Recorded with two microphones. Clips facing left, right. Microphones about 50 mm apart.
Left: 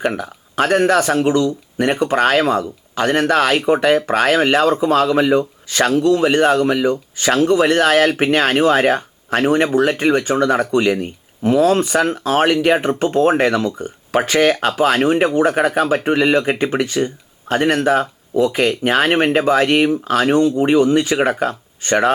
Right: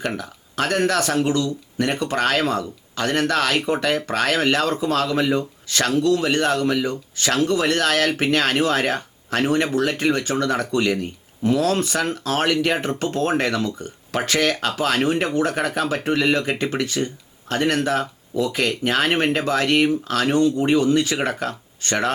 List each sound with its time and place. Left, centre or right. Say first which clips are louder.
0.0 s speech: left 6 dB; centre